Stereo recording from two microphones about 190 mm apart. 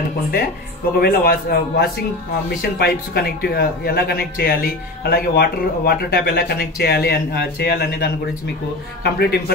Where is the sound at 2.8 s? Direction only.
60° left (ahead or behind).